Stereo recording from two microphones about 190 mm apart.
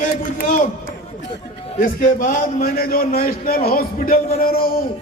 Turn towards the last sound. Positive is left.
turn(degrees=50)  # may be behind; listen again after turning